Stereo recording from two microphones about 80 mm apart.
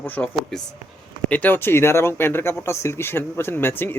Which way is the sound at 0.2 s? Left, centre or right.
Centre.